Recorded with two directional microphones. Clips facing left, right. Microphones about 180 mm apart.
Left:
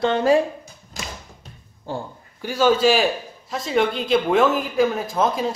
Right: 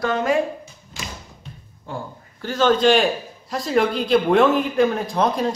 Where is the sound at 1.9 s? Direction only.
35° left (ahead or behind).